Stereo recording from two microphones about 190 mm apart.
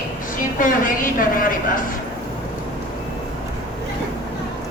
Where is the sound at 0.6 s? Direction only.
45° left (ahead or behind).